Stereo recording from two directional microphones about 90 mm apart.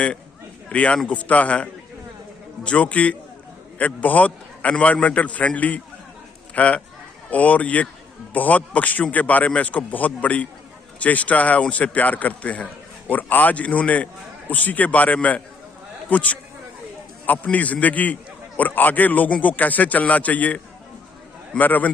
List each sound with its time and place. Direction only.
0.7 s a man's voice: 15° left (ahead or behind)
21.6 s a man's voice: 20° left (ahead or behind)